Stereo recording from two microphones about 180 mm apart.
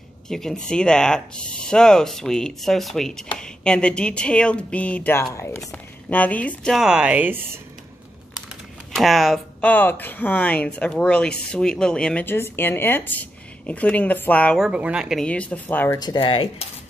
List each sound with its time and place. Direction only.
0.3 s speech: centre (ahead or behind)
8.9 s speech: centre (ahead or behind)
14.7 s speech: 5° right (ahead or behind); by 16.0 s 10° left (ahead or behind)
16.0 s speech: 25° left (ahead or behind)